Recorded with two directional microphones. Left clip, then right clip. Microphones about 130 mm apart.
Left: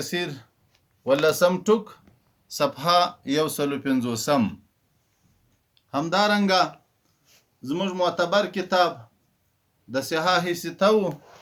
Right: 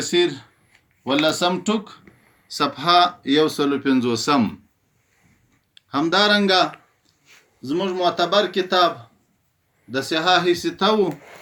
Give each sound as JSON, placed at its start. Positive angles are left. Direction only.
{"t": 0.0, "sound": "speech", "side_deg": 90}
{"t": 5.9, "sound": "speech", "side_deg": 90}
{"t": 9.9, "sound": "speech", "side_deg": 90}